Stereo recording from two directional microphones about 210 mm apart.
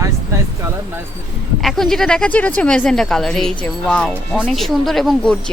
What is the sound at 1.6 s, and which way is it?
Speech, centre (ahead or behind).